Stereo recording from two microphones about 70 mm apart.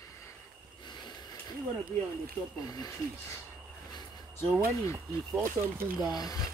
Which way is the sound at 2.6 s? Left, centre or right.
Left.